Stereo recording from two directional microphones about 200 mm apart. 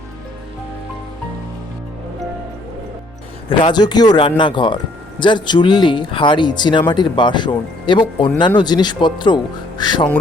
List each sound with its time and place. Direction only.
3.6 s speech: 20° left (ahead or behind)